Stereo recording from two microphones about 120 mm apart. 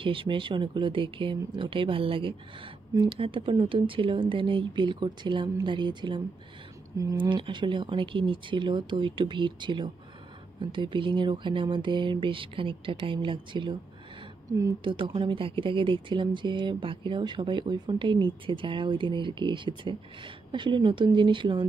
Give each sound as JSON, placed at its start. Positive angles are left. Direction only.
{"t": 0.0, "sound": "speech", "side_deg": -45}
{"t": 14.8, "sound": "speech", "side_deg": -45}